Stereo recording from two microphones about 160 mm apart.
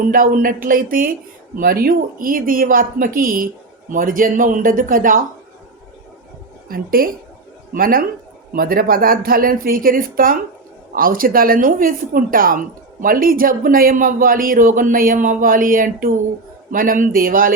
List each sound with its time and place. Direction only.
0.0 s speech: 60° right (ahead or behind)
6.7 s speech: 65° right (ahead or behind)